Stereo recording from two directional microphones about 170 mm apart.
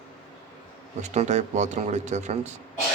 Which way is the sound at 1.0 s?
45° right (ahead or behind).